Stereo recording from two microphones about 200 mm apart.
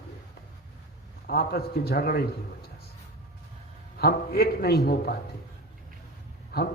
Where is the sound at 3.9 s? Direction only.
50° left (ahead or behind).